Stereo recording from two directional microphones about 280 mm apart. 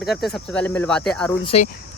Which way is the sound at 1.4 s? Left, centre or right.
Left.